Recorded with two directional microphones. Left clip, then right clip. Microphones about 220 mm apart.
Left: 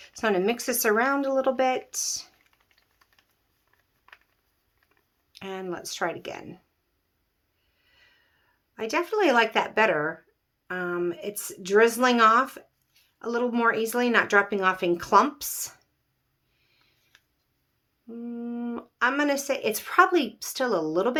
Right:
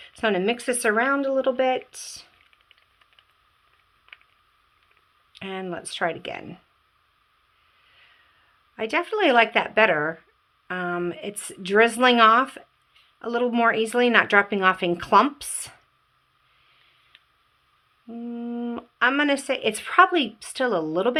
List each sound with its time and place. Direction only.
0.0 s speech: 10° right (ahead or behind)
5.3 s speech: 15° right (ahead or behind)
8.7 s speech: 15° right (ahead or behind)
18.1 s speech: 20° right (ahead or behind)